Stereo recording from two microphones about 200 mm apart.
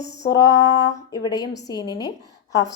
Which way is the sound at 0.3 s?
20° left (ahead or behind).